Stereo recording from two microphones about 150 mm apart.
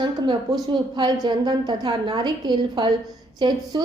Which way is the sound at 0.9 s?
30° right (ahead or behind).